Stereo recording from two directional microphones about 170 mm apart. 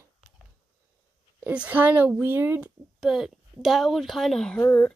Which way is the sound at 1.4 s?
10° right (ahead or behind).